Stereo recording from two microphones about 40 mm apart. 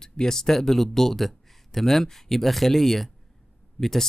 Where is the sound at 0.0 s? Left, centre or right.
Centre.